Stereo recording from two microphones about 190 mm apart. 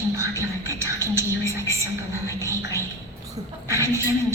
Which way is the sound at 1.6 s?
15° right (ahead or behind).